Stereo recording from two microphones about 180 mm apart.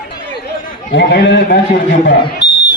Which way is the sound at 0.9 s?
75° left (ahead or behind).